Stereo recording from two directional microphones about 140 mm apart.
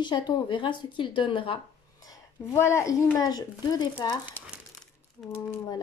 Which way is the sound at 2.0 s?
20° left (ahead or behind).